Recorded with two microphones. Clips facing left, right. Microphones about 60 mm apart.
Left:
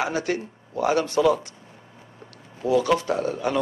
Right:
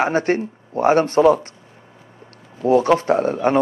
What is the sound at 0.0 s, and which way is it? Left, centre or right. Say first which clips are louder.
Speech: right 7 dB; right.